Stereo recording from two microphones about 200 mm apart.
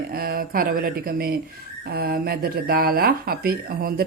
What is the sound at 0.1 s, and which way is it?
Speech, 50° right (ahead or behind).